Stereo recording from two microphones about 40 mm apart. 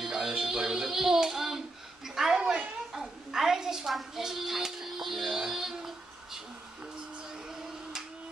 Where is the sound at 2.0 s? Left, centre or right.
Centre.